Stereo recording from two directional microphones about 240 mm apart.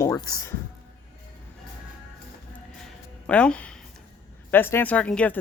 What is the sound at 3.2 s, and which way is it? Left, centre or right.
A woman's voice, centre.